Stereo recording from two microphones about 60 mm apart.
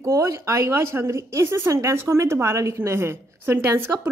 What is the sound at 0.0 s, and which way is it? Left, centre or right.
A woman's voice, right.